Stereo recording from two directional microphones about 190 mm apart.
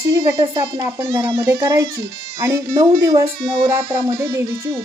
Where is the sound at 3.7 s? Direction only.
15° right (ahead or behind).